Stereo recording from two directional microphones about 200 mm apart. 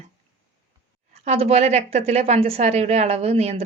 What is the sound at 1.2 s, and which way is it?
Speech, 30° right (ahead or behind).